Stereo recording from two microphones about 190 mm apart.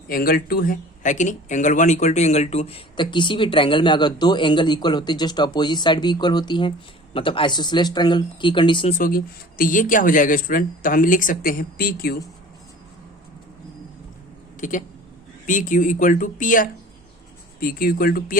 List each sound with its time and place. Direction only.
0.1 s speech: 50° left (ahead or behind); by 8.9 s 25° left (ahead or behind)
8.9 s speech: 45° left (ahead or behind)
14.6 s speech: 40° left (ahead or behind)